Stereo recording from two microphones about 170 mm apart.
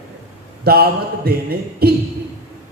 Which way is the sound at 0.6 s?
65° right (ahead or behind).